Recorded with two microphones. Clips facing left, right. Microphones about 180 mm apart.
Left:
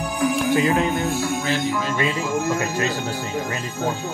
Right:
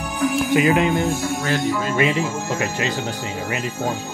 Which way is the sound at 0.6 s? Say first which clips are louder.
Right 5 dB; 15° right (ahead or behind).